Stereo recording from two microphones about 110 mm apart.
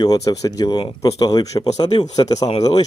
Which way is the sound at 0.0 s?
35° left (ahead or behind).